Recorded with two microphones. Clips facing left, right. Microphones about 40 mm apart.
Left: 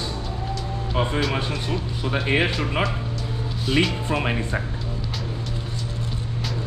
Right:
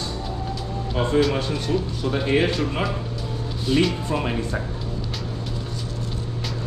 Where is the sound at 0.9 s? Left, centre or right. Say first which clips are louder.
Right 3 dB; centre.